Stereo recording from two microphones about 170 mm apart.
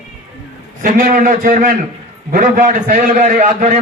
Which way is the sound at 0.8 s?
50° right (ahead or behind).